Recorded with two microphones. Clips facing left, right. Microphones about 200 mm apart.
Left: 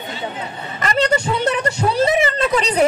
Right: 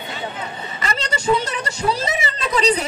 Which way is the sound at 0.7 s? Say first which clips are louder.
Left 9 dB; 55° left (ahead or behind).